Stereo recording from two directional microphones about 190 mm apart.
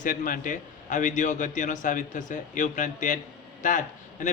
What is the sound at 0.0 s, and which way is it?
A man's voice, 45° left (ahead or behind).